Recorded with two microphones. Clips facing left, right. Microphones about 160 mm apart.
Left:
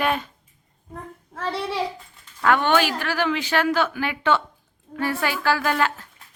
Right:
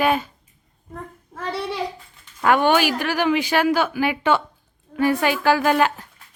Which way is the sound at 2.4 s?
15° right (ahead or behind).